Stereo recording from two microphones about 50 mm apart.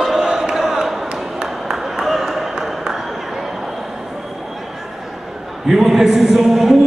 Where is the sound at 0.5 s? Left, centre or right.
Centre.